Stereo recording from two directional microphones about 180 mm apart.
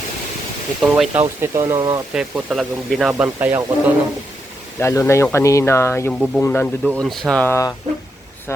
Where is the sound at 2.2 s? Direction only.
5° right (ahead or behind).